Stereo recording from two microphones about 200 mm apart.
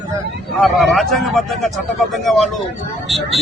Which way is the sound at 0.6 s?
Centre (ahead or behind).